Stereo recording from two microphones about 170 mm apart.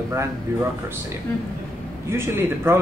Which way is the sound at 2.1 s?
15° right (ahead or behind).